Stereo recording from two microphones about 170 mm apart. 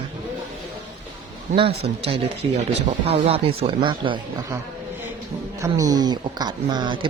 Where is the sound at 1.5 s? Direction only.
45° right (ahead or behind).